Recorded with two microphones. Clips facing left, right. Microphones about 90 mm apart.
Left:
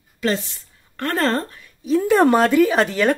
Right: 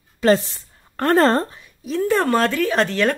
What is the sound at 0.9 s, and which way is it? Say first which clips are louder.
Speech: right 5 dB; 35° right (ahead or behind).